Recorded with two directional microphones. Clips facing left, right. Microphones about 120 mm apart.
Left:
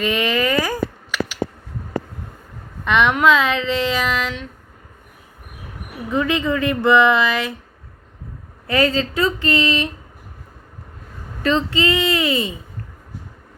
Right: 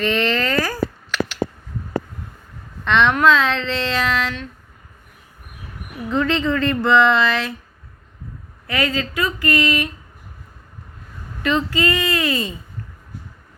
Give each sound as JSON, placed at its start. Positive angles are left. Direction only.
{"t": 0.0, "sound": "a sound", "side_deg": 10}
{"t": 2.8, "sound": "speech", "side_deg": 10}
{"t": 6.1, "sound": "speech", "side_deg": 15}
{"t": 8.6, "sound": "speech", "side_deg": 30}
{"t": 11.4, "sound": "speech", "side_deg": 30}